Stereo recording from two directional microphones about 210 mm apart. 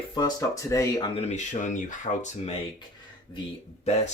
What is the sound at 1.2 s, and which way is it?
Speech, 35° left (ahead or behind).